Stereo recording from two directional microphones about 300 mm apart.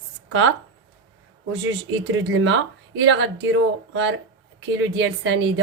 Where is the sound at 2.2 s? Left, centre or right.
Right.